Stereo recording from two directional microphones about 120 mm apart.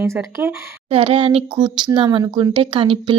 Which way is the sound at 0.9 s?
50° right (ahead or behind).